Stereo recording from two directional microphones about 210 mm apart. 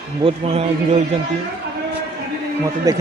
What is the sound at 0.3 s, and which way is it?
Speech, 30° right (ahead or behind).